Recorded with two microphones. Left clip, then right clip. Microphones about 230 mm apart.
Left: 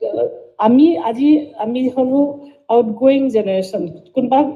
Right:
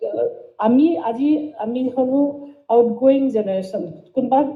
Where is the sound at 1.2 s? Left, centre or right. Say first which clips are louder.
Left 6 dB; left.